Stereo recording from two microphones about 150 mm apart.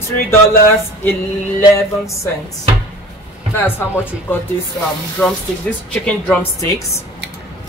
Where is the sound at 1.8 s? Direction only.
20° left (ahead or behind).